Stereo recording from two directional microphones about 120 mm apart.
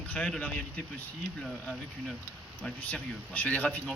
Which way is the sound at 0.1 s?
10° left (ahead or behind).